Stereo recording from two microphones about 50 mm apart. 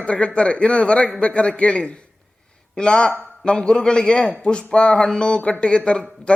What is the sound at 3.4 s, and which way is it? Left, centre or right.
A man's voice, centre.